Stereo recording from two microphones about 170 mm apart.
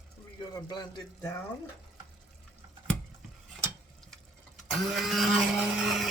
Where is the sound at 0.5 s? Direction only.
25° left (ahead or behind).